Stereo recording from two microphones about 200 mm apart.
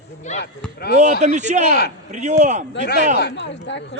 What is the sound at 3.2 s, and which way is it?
Speech, 60° left (ahead or behind).